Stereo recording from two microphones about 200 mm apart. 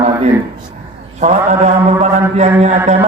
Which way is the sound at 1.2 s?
35° right (ahead or behind).